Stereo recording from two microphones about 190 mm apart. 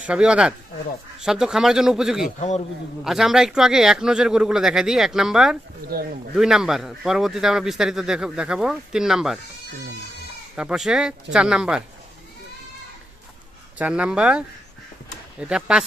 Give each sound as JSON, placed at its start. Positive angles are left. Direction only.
{"t": 0.0, "sound": "a man's voice", "side_deg": -5}
{"t": 2.2, "sound": "a man's voice", "side_deg": 35}
{"t": 3.0, "sound": "a man's voice", "side_deg": 0}
{"t": 10.5, "sound": "a man's voice", "side_deg": -5}
{"t": 13.7, "sound": "a man's voice", "side_deg": -5}